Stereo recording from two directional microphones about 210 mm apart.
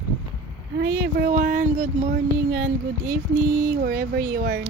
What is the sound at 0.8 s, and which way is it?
Speech, 45° right (ahead or behind).